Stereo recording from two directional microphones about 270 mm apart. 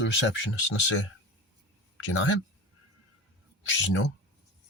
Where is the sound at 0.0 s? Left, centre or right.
Left.